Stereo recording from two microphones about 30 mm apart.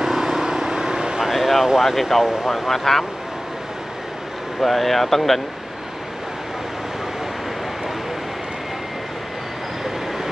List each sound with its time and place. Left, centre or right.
0.0 s vehicle: centre
1.2 s vehicle: centre
1.8 s speech: centre
2.7 s speech: centre
4.6 s speech: centre